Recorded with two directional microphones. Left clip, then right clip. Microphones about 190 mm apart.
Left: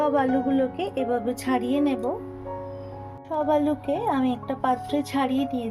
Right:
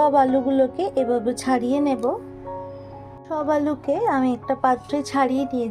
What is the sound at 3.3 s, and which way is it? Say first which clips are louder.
A woman's voice: right 1 dB; 30° right (ahead or behind).